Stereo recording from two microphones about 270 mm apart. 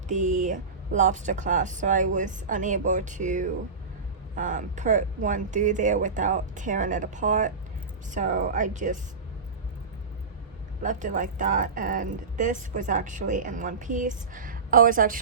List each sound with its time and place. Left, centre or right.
0.1 s speech: right
10.8 s speech: right